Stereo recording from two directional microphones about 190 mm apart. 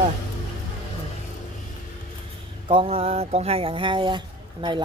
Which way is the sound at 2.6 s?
30° right (ahead or behind).